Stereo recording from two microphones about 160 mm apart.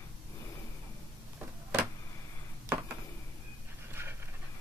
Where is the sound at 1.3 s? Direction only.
10° right (ahead or behind).